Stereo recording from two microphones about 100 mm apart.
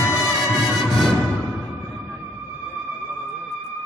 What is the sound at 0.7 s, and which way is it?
Music, centre (ahead or behind).